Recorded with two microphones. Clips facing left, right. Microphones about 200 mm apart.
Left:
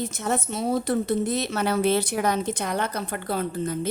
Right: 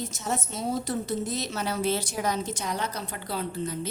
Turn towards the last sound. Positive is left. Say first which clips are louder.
# left 5 dB
turn(degrees=50)  # may be behind; listen again after turning